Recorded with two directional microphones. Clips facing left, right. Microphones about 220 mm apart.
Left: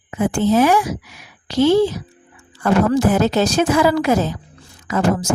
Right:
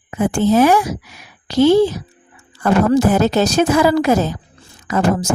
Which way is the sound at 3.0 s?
40° right (ahead or behind).